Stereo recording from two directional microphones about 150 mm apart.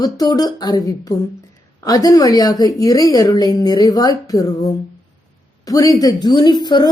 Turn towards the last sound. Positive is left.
turn(degrees=30)  # may be behind; listen again after turning